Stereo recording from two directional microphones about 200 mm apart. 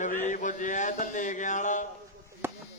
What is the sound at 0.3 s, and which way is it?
Mantra, 40° left (ahead or behind).